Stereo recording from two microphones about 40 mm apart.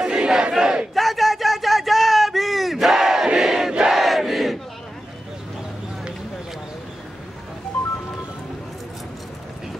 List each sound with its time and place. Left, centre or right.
0.0 s battle cry: centre
0.9 s a sound: centre
3.3 s battle cry: centre
3.9 s crowd: centre